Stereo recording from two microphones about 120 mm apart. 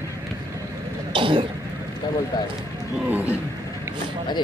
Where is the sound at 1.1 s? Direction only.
45° right (ahead or behind).